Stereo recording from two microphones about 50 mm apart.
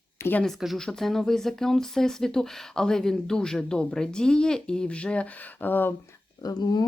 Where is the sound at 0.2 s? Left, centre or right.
Left.